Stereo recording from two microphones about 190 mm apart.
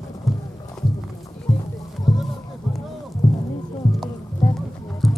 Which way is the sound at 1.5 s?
40° left (ahead or behind).